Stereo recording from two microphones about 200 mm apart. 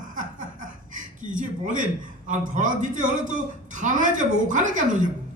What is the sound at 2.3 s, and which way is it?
Speech, 40° right (ahead or behind).